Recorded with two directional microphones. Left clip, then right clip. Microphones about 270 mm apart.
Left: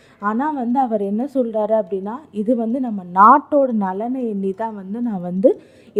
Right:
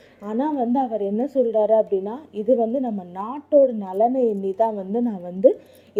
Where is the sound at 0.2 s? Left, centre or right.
Left.